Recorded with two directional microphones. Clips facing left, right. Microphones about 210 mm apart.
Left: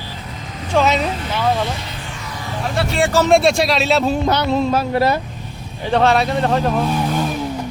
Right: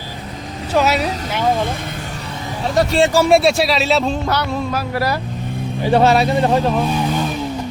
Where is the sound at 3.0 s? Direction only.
10° right (ahead or behind).